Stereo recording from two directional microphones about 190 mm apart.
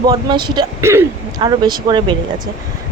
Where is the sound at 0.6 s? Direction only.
15° right (ahead or behind).